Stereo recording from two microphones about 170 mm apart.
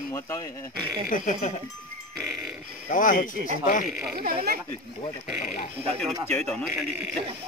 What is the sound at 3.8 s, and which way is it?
Speech, centre (ahead or behind).